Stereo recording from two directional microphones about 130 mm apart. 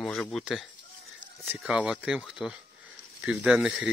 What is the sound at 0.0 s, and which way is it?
Speech, centre (ahead or behind).